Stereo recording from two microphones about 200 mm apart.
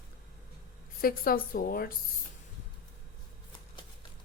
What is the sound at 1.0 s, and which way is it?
Speech, 45° left (ahead or behind).